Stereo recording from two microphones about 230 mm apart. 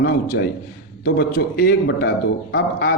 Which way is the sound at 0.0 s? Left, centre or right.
Left.